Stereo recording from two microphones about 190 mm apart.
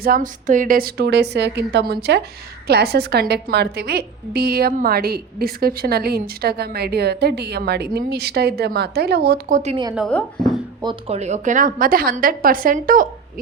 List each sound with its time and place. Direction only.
0.0 s a woman's voice: 50° right (ahead or behind)
10.1 s speech: 5° left (ahead or behind)
10.8 s a woman's voice: 25° right (ahead or behind); by 13.1 s 45° right (ahead or behind)